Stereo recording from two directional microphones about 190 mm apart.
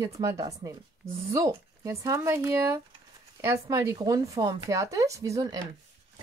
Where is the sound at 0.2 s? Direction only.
15° right (ahead or behind).